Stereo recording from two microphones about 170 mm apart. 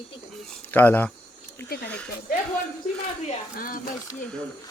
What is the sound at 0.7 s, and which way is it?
Speech, 10° left (ahead or behind).